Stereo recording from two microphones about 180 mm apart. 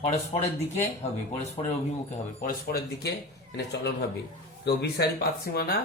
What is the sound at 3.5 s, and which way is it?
A man's voice, 65° left (ahead or behind).